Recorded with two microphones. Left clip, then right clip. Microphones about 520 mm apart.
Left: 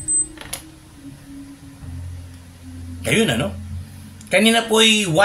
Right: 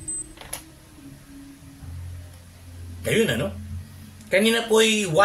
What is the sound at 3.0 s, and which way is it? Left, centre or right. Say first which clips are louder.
A man's voice: left 3 dB; right.